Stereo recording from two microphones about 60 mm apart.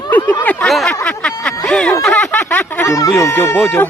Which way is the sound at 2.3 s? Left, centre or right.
Left.